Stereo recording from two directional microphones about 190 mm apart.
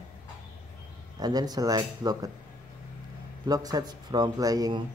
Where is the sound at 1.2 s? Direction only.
20° right (ahead or behind).